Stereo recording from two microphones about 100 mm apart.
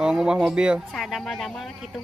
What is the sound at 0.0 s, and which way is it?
Speech, 5° right (ahead or behind).